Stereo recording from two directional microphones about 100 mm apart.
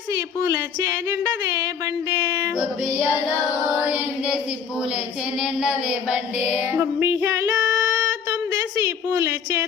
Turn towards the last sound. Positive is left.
turn(degrees=-25)  # may be behind; listen again after turning